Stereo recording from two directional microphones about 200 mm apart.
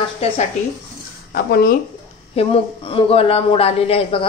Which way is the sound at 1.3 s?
50° left (ahead or behind).